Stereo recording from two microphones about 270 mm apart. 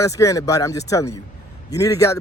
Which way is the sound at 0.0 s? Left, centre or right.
Centre.